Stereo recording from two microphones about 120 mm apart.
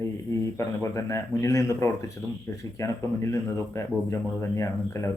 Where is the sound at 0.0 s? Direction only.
25° left (ahead or behind).